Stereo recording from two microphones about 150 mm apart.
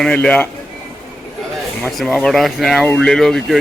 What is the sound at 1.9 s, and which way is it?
Speech, centre (ahead or behind).